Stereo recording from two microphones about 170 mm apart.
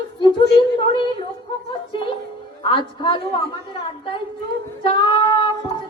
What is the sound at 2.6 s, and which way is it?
Speech, 30° left (ahead or behind).